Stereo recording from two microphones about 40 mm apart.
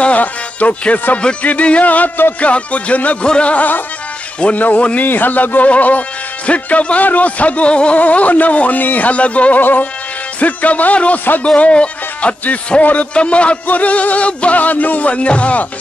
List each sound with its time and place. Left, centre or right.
0.0 s speech: left
1.4 s music: left
4.6 s a man's voice: left
7.1 s music: left
8.0 s music: left
9.6 s a man's voice: left
10.4 s music: left
11.4 s a man's voice: left
13.7 s music: left